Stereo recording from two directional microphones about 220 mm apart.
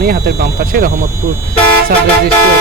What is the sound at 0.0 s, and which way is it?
Speech, 45° right (ahead or behind).